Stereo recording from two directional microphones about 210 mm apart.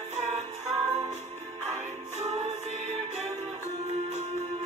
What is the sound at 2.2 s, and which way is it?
Music, 30° right (ahead or behind).